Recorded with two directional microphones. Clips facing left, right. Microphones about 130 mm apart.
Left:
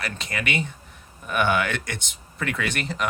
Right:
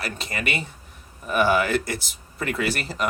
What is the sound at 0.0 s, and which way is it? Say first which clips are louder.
Speech: right 1 dB; centre (ahead or behind).